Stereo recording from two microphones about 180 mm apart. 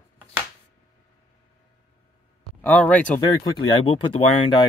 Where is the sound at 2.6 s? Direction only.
10° left (ahead or behind).